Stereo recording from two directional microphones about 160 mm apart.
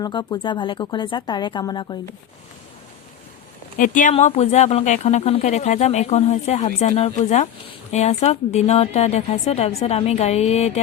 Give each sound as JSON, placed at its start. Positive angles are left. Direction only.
{"t": 0.0, "sound": "speech", "side_deg": 25}
{"t": 3.8, "sound": "speech", "side_deg": 55}
{"t": 4.1, "sound": "speech", "side_deg": 45}